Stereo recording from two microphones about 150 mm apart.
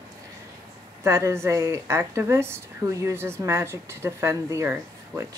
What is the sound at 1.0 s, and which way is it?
Speech, 15° right (ahead or behind).